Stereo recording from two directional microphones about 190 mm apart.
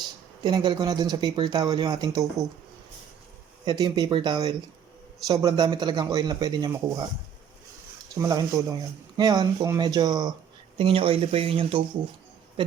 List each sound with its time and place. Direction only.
0.4 s speech: 25° right (ahead or behind)
3.7 s speech: 20° right (ahead or behind)
8.1 s speech: 20° right (ahead or behind)